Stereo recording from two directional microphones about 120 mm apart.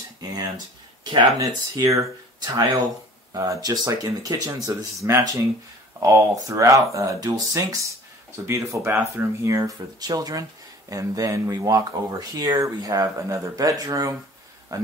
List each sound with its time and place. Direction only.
0.2 s speech: 30° right (ahead or behind)